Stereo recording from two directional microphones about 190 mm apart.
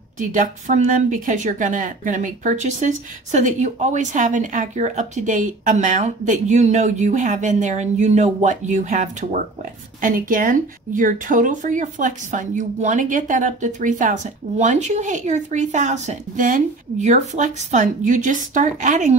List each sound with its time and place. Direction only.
0.2 s speech: 40° right (ahead or behind)